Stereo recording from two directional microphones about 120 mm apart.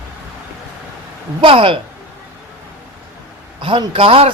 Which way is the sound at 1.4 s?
50° right (ahead or behind).